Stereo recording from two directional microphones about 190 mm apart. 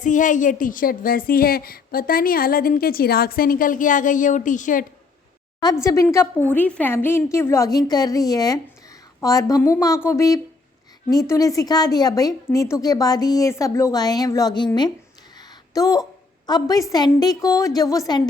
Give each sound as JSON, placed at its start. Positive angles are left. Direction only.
{"t": 0.0, "sound": "a woman's voice", "side_deg": 40}
{"t": 5.8, "sound": "a woman's voice", "side_deg": 15}
{"t": 15.4, "sound": "a sound", "side_deg": 20}
{"t": 16.5, "sound": "a woman's voice", "side_deg": 20}